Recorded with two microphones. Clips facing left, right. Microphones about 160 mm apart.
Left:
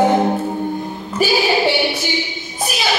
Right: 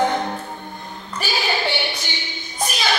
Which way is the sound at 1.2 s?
5° left (ahead or behind).